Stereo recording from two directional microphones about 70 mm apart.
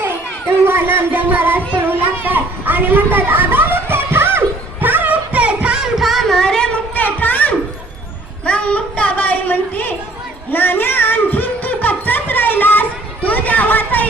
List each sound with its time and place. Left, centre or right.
0.0 s music: right; by 5.9 s centre
6.0 s singing: centre
6.9 s a sound: left